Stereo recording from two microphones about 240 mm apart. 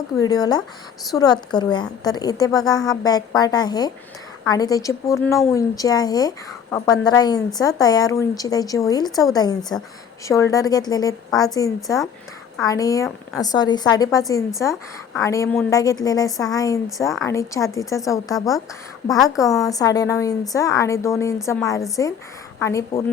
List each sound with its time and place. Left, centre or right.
0.2 s speech: centre
19.6 s speech: centre